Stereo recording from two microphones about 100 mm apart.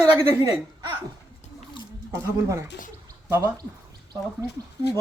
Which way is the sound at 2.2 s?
30° right (ahead or behind).